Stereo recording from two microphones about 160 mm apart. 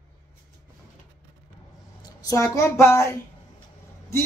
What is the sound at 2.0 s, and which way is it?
A woman's voice, 25° left (ahead or behind).